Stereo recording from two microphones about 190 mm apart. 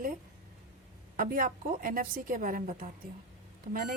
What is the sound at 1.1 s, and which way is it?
A woman's voice, 45° right (ahead or behind).